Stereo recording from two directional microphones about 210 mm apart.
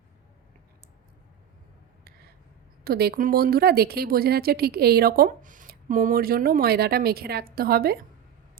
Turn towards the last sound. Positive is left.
turn(degrees=-45)  # may be behind; listen again after turning